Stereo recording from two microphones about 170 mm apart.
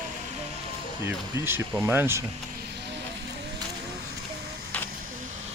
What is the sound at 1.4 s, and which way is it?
Speech, 15° right (ahead or behind).